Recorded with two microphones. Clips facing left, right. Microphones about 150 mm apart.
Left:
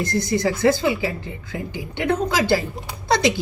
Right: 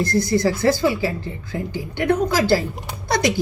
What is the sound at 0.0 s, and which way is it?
Speech, 20° left (ahead or behind).